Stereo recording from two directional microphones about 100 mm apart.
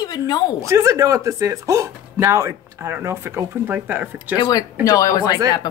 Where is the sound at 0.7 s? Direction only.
30° right (ahead or behind).